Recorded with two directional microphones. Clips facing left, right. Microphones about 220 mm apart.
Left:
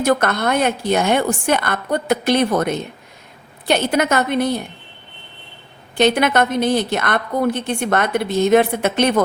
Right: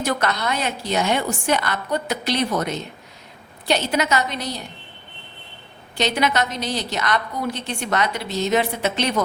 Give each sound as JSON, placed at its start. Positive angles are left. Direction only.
{"t": 0.0, "sound": "a woman's voice", "side_deg": 50}
{"t": 6.0, "sound": "a woman's voice", "side_deg": 55}